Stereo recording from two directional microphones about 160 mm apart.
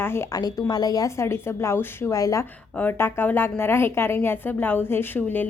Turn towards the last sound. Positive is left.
turn(degrees=10)  # may be behind; listen again after turning